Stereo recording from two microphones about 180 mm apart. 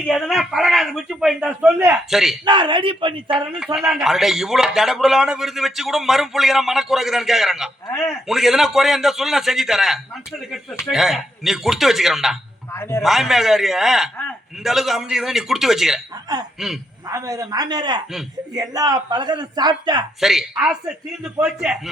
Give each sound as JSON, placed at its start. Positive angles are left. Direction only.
{"t": 0.1, "sound": "a man's voice", "side_deg": 0}
{"t": 2.0, "sound": "a man's voice", "side_deg": 0}
{"t": 2.4, "sound": "a man's voice", "side_deg": -25}
{"t": 3.8, "sound": "a man's voice", "side_deg": 0}
{"t": 7.9, "sound": "a man's voice", "side_deg": 15}
{"t": 8.1, "sound": "a man's voice", "side_deg": 0}
{"t": 12.7, "sound": "a man's voice", "side_deg": 15}
{"t": 13.0, "sound": "a man's voice", "side_deg": 0}
{"t": 17.1, "sound": "a man's voice", "side_deg": -20}
{"t": 20.2, "sound": "a man's voice", "side_deg": -5}